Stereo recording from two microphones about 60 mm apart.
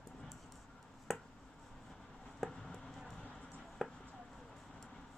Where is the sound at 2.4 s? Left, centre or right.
Centre.